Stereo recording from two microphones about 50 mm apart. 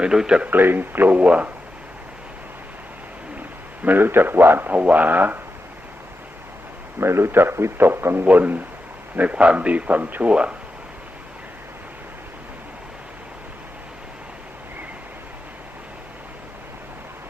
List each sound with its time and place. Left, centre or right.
0.0 s speech: centre
0.4 s speech: right
3.8 s a man's voice: right
4.7 s speech: right
7.0 s a man's voice: right
10.2 s speech: right